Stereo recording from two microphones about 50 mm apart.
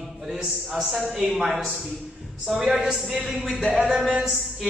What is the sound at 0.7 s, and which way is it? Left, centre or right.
A man's voice, centre.